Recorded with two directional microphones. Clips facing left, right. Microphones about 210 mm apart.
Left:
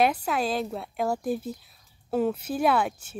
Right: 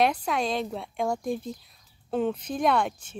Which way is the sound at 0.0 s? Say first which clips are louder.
Left 1 dB; 5° left (ahead or behind).